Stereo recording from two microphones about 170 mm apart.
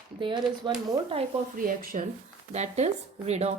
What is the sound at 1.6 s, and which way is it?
Speech, 55° right (ahead or behind).